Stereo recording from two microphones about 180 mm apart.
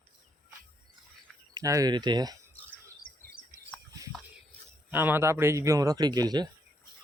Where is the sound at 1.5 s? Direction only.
20° right (ahead or behind).